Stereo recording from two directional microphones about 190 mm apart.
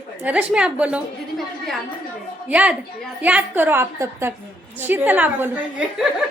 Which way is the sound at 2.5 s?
5° right (ahead or behind).